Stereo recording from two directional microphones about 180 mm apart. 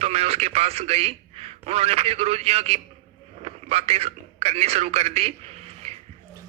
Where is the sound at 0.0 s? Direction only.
35° right (ahead or behind).